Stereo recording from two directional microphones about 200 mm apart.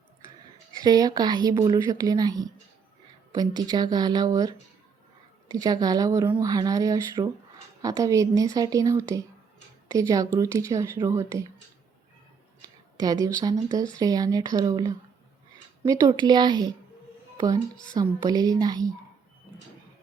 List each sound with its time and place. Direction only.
0.7 s a woman's voice: 20° right (ahead or behind)
13.0 s a woman's voice: 20° right (ahead or behind)